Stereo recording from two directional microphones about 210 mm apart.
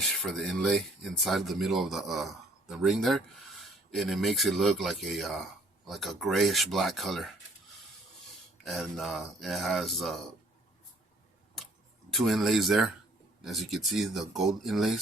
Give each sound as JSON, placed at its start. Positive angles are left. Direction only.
{"t": 0.0, "sound": "speech", "side_deg": 0}
{"t": 8.6, "sound": "speech", "side_deg": 0}
{"t": 12.1, "sound": "speech", "side_deg": 0}